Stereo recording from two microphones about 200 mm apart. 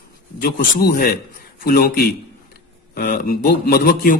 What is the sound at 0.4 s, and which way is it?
Speech, 45° left (ahead or behind).